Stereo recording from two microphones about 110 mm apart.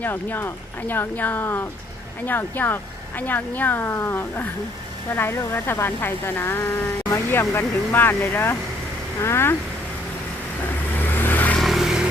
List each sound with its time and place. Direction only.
0.0 s speech: 20° left (ahead or behind)
11.0 s vehicle: 15° left (ahead or behind)
11.6 s vehicle: 5° right (ahead or behind)